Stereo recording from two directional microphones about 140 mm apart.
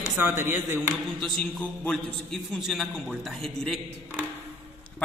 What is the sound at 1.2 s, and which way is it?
A man's voice, 5° left (ahead or behind).